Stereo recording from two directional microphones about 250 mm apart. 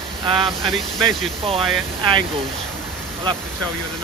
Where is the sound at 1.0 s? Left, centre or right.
Right.